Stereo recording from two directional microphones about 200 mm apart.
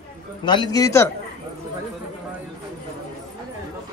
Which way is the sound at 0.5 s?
20° left (ahead or behind).